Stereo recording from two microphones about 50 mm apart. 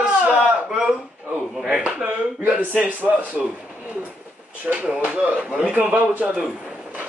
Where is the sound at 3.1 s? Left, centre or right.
Right.